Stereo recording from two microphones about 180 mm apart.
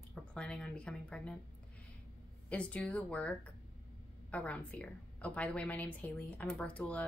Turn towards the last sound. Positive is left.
turn(degrees=10)  # may be behind; listen again after turning